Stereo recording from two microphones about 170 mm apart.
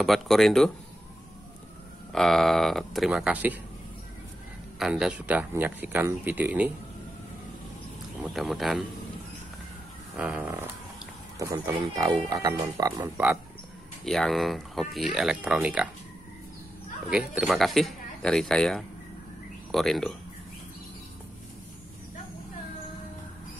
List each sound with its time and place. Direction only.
0.0 s speech: centre (ahead or behind)
2.1 s speech: centre (ahead or behind)
4.7 s speech: 5° right (ahead or behind)
8.2 s speech: centre (ahead or behind)
10.1 s speech: 10° right (ahead or behind)
14.0 s speech: centre (ahead or behind)
17.1 s speech: 5° right (ahead or behind)